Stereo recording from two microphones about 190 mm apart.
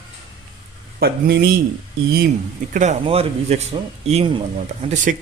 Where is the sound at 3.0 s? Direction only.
30° right (ahead or behind).